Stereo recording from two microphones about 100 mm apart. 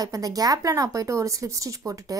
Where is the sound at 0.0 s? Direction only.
40° right (ahead or behind).